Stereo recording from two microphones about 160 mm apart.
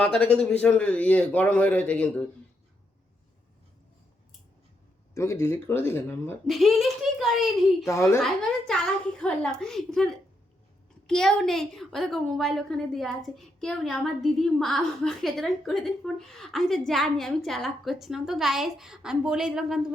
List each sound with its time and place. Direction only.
0.0 s a man's voice: 5° left (ahead or behind)
5.1 s a man's voice: 15° left (ahead or behind)
6.5 s a child's voice: centre (ahead or behind)
7.9 s a man's voice: 20° left (ahead or behind)
8.2 s a woman's voice: 5° left (ahead or behind)